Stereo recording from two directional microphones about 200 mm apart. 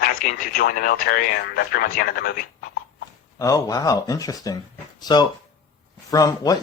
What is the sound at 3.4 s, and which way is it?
Speech, 15° left (ahead or behind).